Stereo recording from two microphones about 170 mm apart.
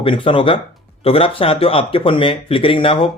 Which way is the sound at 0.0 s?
30° left (ahead or behind).